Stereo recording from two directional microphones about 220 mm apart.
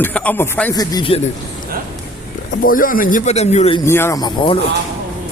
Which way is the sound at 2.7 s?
40° left (ahead or behind).